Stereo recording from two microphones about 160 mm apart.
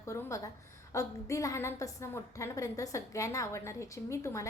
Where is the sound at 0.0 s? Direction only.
20° left (ahead or behind).